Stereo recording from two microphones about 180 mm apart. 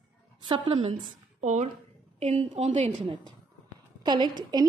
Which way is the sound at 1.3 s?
40° right (ahead or behind).